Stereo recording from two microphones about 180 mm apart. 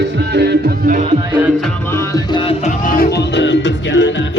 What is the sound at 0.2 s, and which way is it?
Music, 65° right (ahead or behind).